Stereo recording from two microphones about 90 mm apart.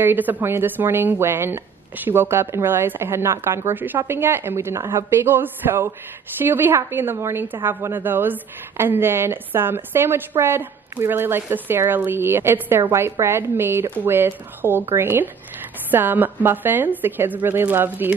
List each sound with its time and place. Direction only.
0.0 s a woman's voice: 20° right (ahead or behind)